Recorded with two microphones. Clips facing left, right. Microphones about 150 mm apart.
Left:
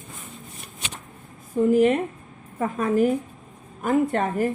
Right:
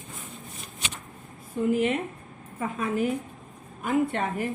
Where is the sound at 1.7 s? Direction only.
40° left (ahead or behind).